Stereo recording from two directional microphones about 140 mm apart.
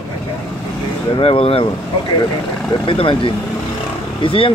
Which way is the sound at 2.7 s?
40° left (ahead or behind).